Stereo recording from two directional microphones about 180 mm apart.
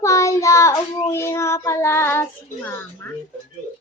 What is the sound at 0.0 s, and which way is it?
Child singing, 15° left (ahead or behind).